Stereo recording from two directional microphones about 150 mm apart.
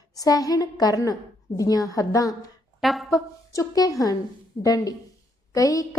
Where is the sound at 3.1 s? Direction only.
25° left (ahead or behind).